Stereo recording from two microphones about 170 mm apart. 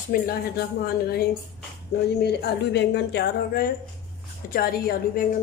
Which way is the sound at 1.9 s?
80° left.